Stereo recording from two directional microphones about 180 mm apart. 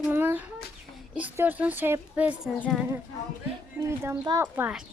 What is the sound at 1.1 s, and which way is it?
A woman's voice, 10° right (ahead or behind).